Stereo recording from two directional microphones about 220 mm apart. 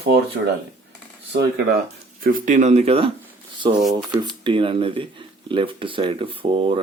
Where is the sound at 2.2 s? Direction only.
40° right (ahead or behind).